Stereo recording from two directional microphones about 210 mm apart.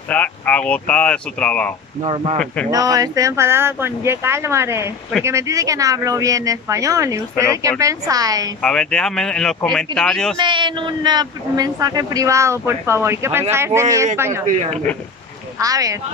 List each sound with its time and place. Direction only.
0.1 s speech: 5° left (ahead or behind)
2.0 s speech: 30° right (ahead or behind)
2.7 s speech: 15° right (ahead or behind)
8.6 s speech: 5° left (ahead or behind)
10.4 s speech: 20° right (ahead or behind)
14.4 s speech: 35° right (ahead or behind)
15.6 s speech: 15° right (ahead or behind)